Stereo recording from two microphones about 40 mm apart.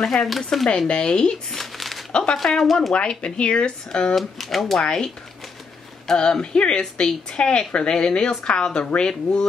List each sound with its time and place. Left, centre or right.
0.0 s speech: centre
0.7 s a woman's voice: left
1.5 s crumpling: centre
2.3 s speech: centre
2.9 s a woman's voice: left
4.1 s speech: centre
6.0 s a woman's voice: centre